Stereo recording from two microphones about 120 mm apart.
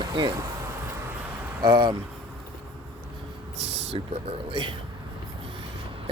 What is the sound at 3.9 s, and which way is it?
Speech, 45° right (ahead or behind).